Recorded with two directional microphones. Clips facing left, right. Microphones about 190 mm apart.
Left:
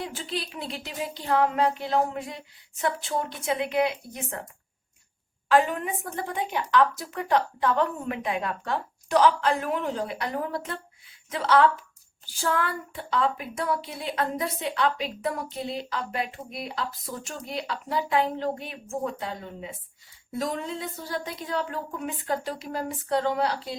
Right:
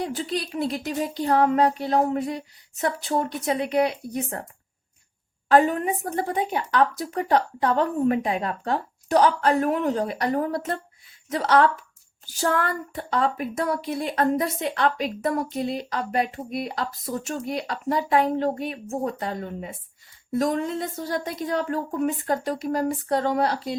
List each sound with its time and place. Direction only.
0.0 s speech: 40° right (ahead or behind)
5.5 s speech: 40° right (ahead or behind)